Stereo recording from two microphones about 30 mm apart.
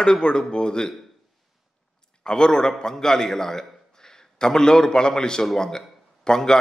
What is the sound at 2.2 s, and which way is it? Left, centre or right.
A man's voice, left.